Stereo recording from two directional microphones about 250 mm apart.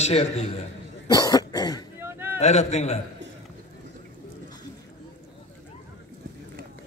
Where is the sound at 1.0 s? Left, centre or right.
Centre.